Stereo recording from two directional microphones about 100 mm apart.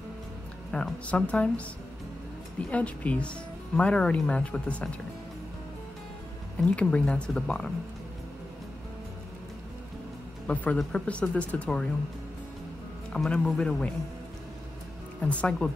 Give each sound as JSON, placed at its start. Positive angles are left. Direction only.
{"t": 0.7, "sound": "speech", "side_deg": 5}
{"t": 2.6, "sound": "speech", "side_deg": 15}
{"t": 6.7, "sound": "speech", "side_deg": 10}
{"t": 10.4, "sound": "speech", "side_deg": 15}
{"t": 13.1, "sound": "speech", "side_deg": 10}
{"t": 15.2, "sound": "speech", "side_deg": 10}